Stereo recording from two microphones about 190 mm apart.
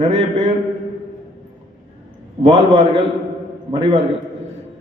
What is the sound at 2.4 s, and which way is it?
A man's voice, 35° right (ahead or behind).